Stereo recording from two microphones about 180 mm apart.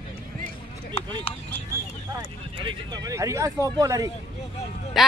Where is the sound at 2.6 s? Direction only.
25° right (ahead or behind).